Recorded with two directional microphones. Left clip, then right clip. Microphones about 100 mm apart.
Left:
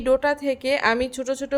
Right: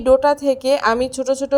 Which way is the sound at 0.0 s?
20° right (ahead or behind).